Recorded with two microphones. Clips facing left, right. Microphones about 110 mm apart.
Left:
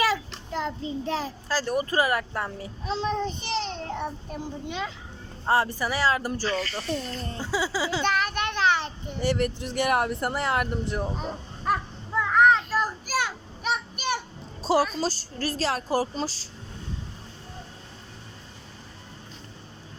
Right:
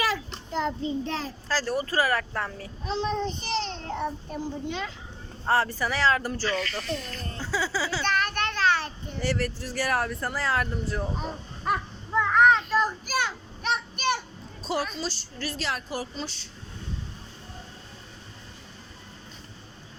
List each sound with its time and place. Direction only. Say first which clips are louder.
0.5 s a child's voice: right 2 dB; 5° left (ahead or behind)
5.5 s a child's voice: left 1 dB; 15° left (ahead or behind)
6.5 s a woman's voice: left 1 dB; 30° left (ahead or behind)
7.3 s a child's voice: left 1 dB; 15° left (ahead or behind)
11.2 s a sound: left 1 dB; centre (ahead or behind)
14.6 s a sound: left 7 dB; 35° left (ahead or behind)
15.0 s a woman's voice: left 5 dB; 40° left (ahead or behind)